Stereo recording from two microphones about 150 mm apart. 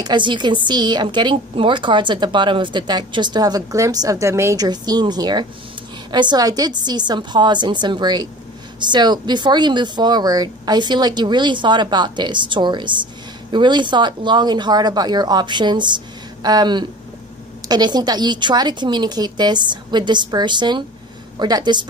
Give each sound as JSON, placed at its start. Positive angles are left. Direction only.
{"t": 0.0, "sound": "speech", "side_deg": -30}